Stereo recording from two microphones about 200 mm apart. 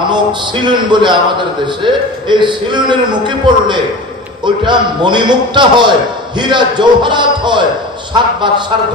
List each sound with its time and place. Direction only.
0.1 s a man's voice: 20° right (ahead or behind)